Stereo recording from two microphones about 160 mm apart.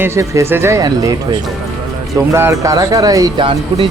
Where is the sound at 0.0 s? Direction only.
20° right (ahead or behind).